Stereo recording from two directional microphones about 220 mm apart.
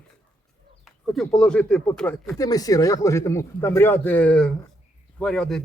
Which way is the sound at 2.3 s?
15° left (ahead or behind).